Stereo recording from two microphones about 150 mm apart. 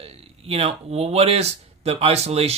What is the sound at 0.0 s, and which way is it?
Speech, 40° right (ahead or behind).